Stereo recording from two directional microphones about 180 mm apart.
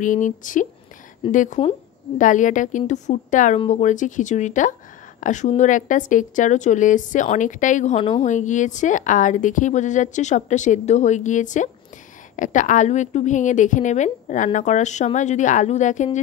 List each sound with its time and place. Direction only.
0.0 s a woman's voice: 45° left (ahead or behind)